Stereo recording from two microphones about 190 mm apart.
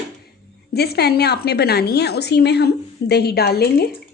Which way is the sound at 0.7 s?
55° left (ahead or behind).